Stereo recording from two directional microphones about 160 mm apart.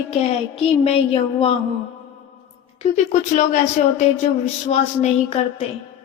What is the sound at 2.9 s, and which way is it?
Speech, 45° left (ahead or behind).